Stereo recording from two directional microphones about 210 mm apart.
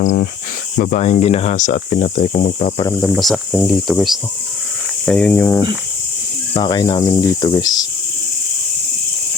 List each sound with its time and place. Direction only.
0.0 s speech: 35° left (ahead or behind)
2.9 s speech: centre (ahead or behind)
6.5 s speech: 20° left (ahead or behind)